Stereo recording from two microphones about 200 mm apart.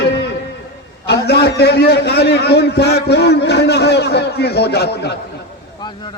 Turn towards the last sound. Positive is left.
turn(degrees=55)  # may be behind; listen again after turning